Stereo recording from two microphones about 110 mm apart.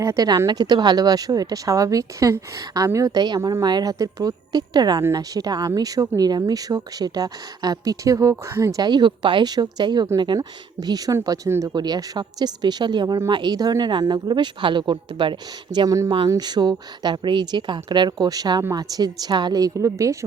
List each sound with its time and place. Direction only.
0.0 s a woman's voice: 30° right (ahead or behind)
0.4 s speech: 40° right (ahead or behind)
11.7 s speech: 40° right (ahead or behind)